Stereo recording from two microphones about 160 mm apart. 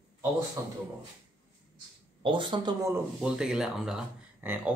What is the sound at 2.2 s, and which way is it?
Speech, 30° right (ahead or behind).